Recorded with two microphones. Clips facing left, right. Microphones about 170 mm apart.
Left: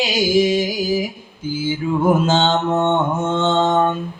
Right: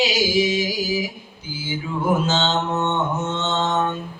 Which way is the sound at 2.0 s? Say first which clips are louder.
Left 4 dB; 50° left (ahead or behind).